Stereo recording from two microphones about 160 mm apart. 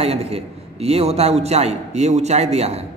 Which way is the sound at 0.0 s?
40° right (ahead or behind).